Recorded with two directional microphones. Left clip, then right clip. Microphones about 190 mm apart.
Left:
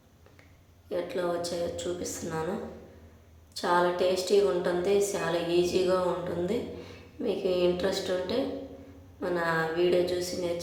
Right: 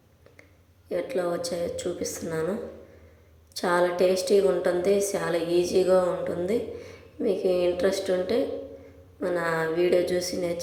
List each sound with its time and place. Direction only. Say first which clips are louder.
0.9 s a woman's voice: right 3 dB; 20° right (ahead or behind)
3.5 s a woman's voice: right 2 dB; 20° right (ahead or behind)